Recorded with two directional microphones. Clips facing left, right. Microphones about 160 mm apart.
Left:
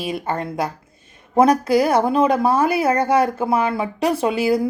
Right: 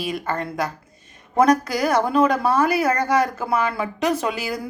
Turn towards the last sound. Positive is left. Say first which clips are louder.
# left 6 dB
turn(degrees=30)  # may be behind; listen again after turning